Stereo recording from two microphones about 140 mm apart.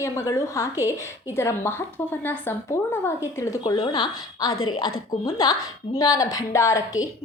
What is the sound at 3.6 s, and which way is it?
A woman's voice, 30° left (ahead or behind).